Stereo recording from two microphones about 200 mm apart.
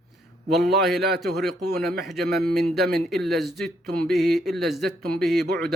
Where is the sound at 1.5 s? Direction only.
55° right (ahead or behind).